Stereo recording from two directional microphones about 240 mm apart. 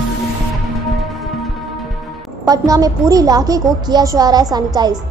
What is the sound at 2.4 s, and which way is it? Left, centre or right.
A woman's voice, centre.